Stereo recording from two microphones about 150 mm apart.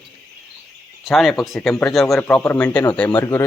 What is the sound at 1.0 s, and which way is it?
Speech, centre (ahead or behind).